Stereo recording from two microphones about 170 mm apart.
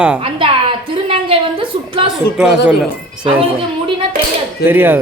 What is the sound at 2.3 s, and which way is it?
Speech, 5° right (ahead or behind).